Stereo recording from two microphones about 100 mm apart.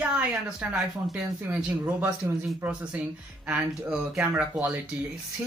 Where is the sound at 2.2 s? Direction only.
30° right (ahead or behind).